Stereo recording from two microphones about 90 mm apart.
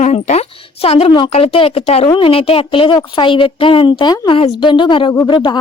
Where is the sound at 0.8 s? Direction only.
90° left.